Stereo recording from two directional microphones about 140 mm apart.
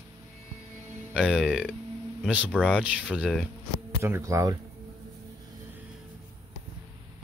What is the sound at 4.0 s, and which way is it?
Speech, 20° right (ahead or behind).